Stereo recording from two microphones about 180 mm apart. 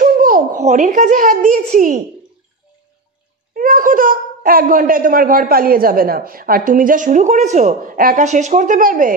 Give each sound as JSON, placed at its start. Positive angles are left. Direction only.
{"t": 0.0, "sound": "a child's voice", "side_deg": -50}
{"t": 3.5, "sound": "a child's voice", "side_deg": -50}